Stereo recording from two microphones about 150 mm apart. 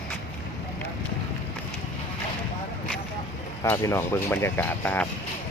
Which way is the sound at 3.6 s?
20° left (ahead or behind).